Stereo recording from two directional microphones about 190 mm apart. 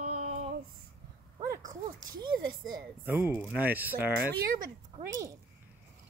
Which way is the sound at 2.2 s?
25° right (ahead or behind).